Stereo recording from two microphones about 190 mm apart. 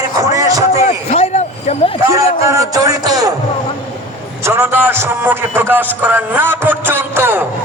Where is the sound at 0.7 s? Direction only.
35° left (ahead or behind).